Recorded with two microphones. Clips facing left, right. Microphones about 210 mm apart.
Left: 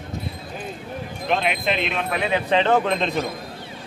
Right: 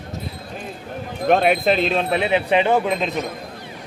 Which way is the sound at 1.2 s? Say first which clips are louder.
Right 7 dB; 45° right (ahead or behind).